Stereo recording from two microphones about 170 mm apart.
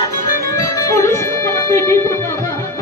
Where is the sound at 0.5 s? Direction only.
20° left (ahead or behind).